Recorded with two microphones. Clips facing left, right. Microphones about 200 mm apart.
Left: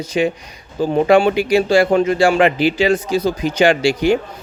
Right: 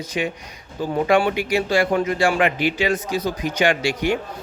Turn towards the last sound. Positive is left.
turn(degrees=30)  # may be behind; listen again after turning